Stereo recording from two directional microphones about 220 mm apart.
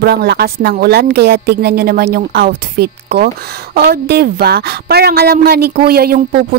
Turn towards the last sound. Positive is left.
turn(degrees=-45)  # may be behind; listen again after turning